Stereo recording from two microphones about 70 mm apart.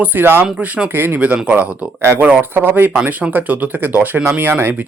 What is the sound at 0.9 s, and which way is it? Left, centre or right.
Speech, right.